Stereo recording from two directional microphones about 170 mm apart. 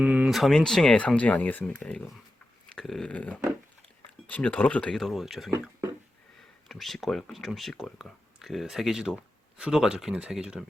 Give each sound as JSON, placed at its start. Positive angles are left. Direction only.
{"t": 0.0, "sound": "speech", "side_deg": -10}
{"t": 2.6, "sound": "dog", "side_deg": 0}
{"t": 4.3, "sound": "speech", "side_deg": 10}
{"t": 5.5, "sound": "speech", "side_deg": -15}
{"t": 6.7, "sound": "speech", "side_deg": 0}